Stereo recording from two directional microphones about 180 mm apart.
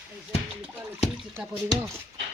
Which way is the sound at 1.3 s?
15° right (ahead or behind).